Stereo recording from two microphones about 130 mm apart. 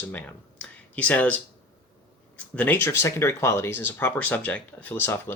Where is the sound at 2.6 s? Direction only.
15° left (ahead or behind).